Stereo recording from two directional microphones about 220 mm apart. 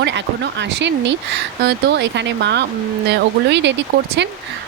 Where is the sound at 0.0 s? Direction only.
55° right (ahead or behind).